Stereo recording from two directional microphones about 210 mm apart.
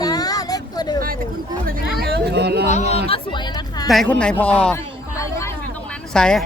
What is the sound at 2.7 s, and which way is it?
A man's voice, 30° left (ahead or behind).